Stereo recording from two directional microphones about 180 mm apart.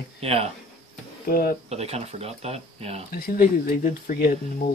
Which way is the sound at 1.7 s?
35° right (ahead or behind).